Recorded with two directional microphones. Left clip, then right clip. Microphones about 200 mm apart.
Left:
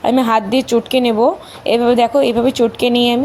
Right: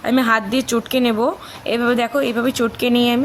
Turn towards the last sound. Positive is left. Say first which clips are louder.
# left 4 dB
turn(degrees=5)  # may be behind; listen again after turning